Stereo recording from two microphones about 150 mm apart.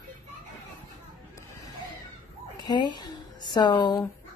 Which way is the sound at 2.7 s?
30° left (ahead or behind).